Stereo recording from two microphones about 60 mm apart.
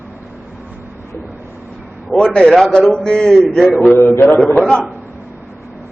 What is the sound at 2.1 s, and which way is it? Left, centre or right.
A man's voice, centre.